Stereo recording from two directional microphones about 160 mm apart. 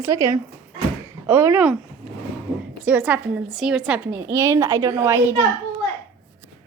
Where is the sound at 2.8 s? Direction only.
10° right (ahead or behind).